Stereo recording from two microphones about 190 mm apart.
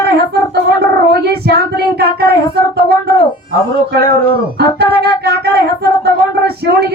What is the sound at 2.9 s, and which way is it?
Speech, 55° right (ahead or behind).